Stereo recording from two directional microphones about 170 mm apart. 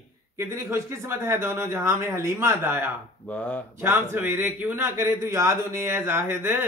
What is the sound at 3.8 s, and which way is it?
A man's voice, 15° right (ahead or behind).